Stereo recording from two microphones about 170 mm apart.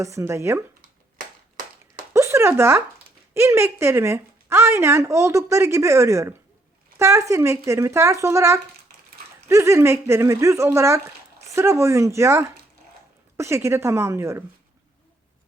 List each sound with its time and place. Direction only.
0.0 s speech: 15° right (ahead or behind)
2.1 s speech: 15° right (ahead or behind)